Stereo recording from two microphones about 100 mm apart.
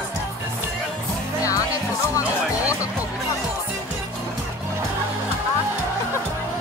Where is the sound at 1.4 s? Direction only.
35° left (ahead or behind).